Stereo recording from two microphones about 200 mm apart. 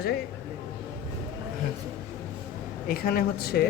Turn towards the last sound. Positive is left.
turn(degrees=50)  # may be behind; listen again after turning